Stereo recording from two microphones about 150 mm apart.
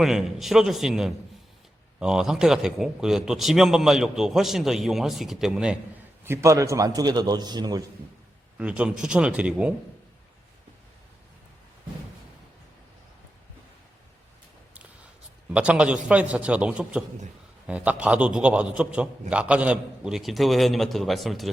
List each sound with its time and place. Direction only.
0.0 s a man's voice: 5° right (ahead or behind)
6.2 s a man's voice: 20° right (ahead or behind)
8.5 s a man's voice: 5° right (ahead or behind)
15.5 s a man's voice: 10° right (ahead or behind)